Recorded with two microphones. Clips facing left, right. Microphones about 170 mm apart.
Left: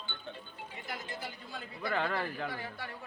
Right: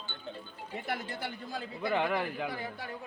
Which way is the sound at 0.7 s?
65° right (ahead or behind).